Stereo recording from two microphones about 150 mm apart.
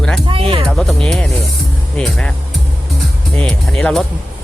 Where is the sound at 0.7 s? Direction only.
5° left (ahead or behind).